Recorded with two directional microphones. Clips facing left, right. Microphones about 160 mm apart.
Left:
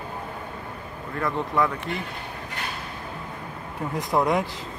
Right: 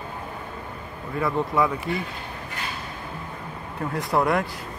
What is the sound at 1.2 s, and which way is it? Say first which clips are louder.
Speech: right 2 dB; 5° right (ahead or behind).